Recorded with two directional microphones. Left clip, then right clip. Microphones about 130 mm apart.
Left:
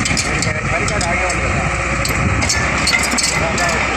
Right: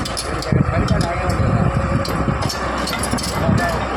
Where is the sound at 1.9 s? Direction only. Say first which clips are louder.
Left 3 dB; 10° left (ahead or behind).